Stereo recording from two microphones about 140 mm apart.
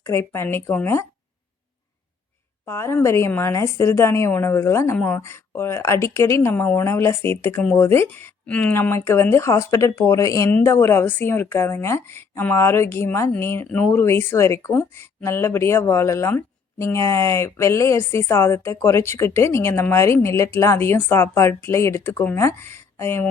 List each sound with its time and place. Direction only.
0.0 s speech: 20° left (ahead or behind)
2.6 s speech: 15° left (ahead or behind)